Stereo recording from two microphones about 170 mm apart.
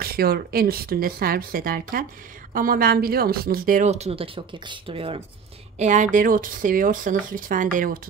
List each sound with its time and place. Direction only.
0.0 s speech: 65° right (ahead or behind); by 5.2 s 35° right (ahead or behind)
5.8 s speech: 45° right (ahead or behind)